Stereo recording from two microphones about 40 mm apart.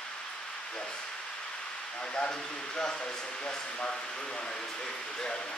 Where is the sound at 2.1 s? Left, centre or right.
Left.